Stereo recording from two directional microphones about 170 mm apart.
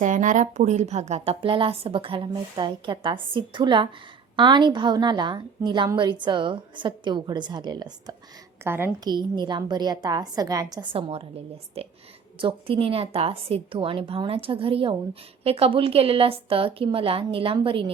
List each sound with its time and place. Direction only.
0.0 s a woman's voice: 45° right (ahead or behind); by 8.1 s 25° right (ahead or behind)
8.6 s a woman's voice: 15° right (ahead or behind)
9.0 s a woman's voice: 25° right (ahead or behind)
11.8 s a woman's voice: 35° right (ahead or behind)